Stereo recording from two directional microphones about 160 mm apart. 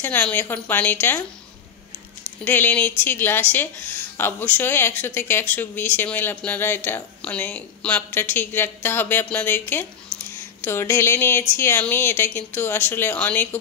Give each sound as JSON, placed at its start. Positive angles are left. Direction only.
{"t": 0.0, "sound": "a woman's voice", "side_deg": 10}
{"t": 2.4, "sound": "a woman's voice", "side_deg": 10}